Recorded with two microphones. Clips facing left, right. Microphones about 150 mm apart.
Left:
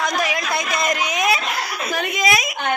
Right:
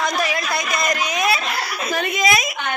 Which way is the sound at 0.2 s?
15° left (ahead or behind).